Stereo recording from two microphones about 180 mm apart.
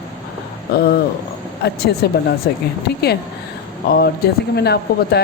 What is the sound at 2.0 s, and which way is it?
Speech, 65° left (ahead or behind).